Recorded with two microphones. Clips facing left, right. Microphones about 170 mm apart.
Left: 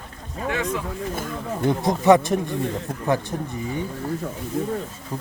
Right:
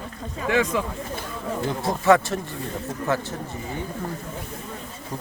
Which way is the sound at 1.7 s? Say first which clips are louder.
Left 3 dB; 20° left (ahead or behind).